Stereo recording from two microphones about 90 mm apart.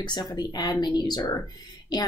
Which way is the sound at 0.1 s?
50° left (ahead or behind).